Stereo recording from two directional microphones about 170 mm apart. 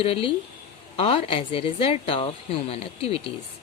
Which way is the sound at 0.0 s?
35° left (ahead or behind).